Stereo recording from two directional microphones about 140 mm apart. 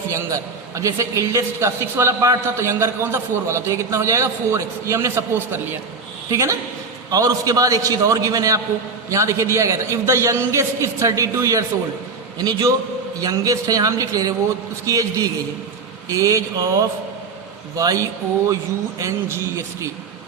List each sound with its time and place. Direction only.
0.8 s a man's voice: 20° right (ahead or behind)